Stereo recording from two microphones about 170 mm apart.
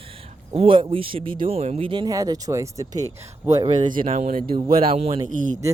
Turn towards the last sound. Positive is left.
turn(degrees=-50)  # may be behind; listen again after turning